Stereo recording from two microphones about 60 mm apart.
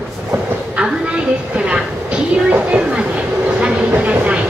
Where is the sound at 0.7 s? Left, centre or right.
Centre.